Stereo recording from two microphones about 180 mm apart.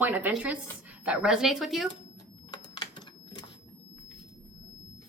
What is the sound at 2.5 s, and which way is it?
Typing, 25° left (ahead or behind).